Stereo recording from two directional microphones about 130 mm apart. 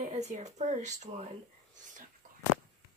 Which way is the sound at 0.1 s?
60° right (ahead or behind).